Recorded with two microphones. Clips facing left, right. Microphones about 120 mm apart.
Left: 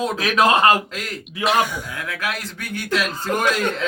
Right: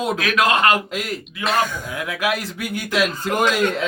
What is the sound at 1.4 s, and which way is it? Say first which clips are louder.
Speech: left 2 dB; 10° left (ahead or behind).